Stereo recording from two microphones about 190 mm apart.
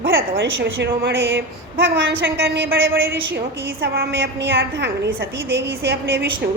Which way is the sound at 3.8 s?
55° right (ahead or behind).